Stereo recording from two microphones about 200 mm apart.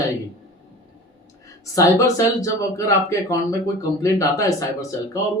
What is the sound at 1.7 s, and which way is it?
Speech, 15° left (ahead or behind).